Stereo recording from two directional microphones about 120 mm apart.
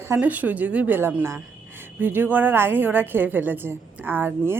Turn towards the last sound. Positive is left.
turn(degrees=-15)  # may be behind; listen again after turning